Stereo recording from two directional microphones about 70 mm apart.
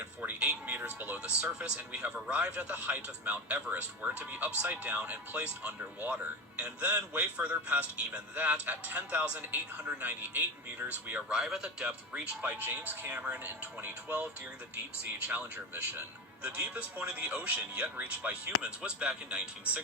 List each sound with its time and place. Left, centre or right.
0.0 s a man's voice: right
1.2 s a man's voice: centre
11.9 s a man's voice: right
15.3 s a man's voice: right